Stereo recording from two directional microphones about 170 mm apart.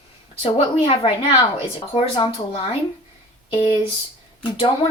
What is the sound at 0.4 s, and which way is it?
A woman's voice, 30° left (ahead or behind).